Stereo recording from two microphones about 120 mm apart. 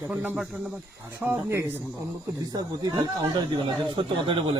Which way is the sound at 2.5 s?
35° right (ahead or behind).